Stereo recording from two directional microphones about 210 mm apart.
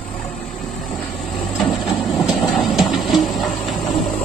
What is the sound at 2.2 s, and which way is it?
Train, centre (ahead or behind).